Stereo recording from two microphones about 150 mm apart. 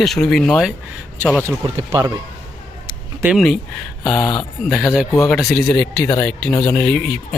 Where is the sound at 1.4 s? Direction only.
30° right (ahead or behind).